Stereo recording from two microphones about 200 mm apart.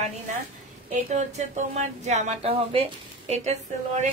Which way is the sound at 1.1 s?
35° right (ahead or behind).